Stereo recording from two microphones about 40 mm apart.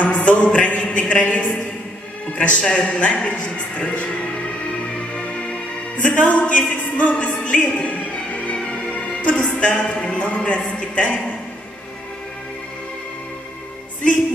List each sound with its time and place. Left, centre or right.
0.0 s a sound: left
0.7 s speech: left
3.3 s music: left
9.3 s speech: left